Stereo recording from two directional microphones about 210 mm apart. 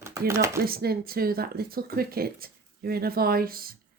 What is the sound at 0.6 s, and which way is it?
Speech, 45° right (ahead or behind).